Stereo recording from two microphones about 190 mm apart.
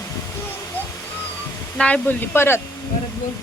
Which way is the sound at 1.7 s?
5° left (ahead or behind).